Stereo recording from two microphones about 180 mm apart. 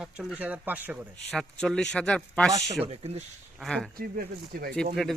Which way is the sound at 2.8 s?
35° right (ahead or behind).